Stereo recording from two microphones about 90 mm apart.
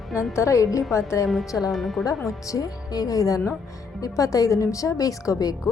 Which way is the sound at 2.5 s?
40° left (ahead or behind).